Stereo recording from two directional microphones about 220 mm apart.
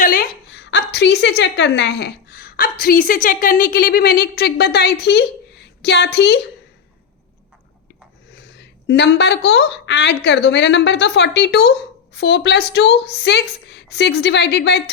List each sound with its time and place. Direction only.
0.0 s a woman's voice: 40° left (ahead or behind)
8.3 s a woman's voice: 50° left (ahead or behind)